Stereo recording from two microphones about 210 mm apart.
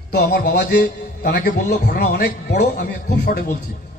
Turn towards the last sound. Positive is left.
turn(degrees=50)  # may be behind; listen again after turning